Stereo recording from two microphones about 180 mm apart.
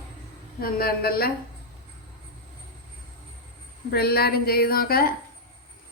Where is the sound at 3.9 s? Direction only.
60° left (ahead or behind).